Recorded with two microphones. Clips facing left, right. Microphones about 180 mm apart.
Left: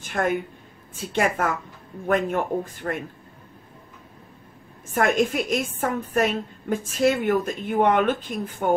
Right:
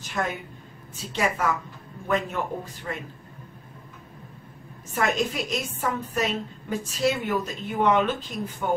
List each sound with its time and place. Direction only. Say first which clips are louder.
0.0 s a woman's voice: left 6 dB; 50° left (ahead or behind)
4.9 s a woman's voice: left 4 dB; 50° left (ahead or behind)